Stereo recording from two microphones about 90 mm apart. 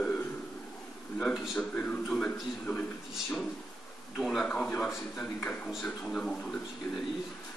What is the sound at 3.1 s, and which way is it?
Speech, centre (ahead or behind).